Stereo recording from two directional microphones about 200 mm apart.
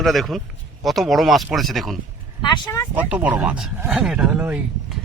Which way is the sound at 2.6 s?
15° left (ahead or behind).